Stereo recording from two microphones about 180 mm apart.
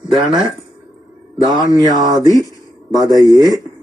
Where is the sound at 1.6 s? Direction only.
25° right (ahead or behind).